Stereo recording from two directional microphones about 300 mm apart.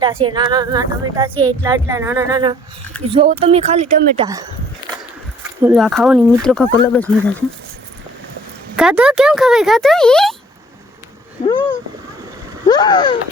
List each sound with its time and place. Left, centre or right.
0.0 s a woman's voice: centre
5.4 s speech: centre
8.7 s speech: centre
12.6 s a sound: centre